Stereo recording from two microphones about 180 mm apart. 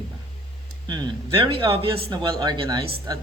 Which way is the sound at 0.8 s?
25° right (ahead or behind).